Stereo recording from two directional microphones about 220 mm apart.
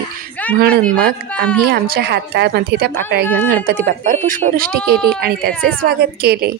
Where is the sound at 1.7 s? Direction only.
45° right (ahead or behind).